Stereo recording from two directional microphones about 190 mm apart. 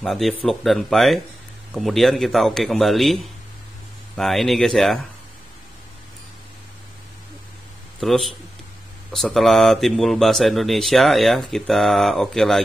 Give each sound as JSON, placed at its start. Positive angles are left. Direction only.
{"t": 0.0, "sound": "speech", "side_deg": 0}
{"t": 4.2, "sound": "speech", "side_deg": 0}
{"t": 8.0, "sound": "speech", "side_deg": 0}